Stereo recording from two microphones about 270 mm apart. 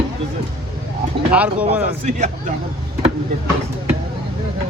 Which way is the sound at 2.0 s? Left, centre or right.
Right.